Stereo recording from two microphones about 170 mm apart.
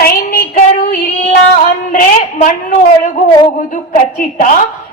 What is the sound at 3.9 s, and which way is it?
Speech, 50° left (ahead or behind).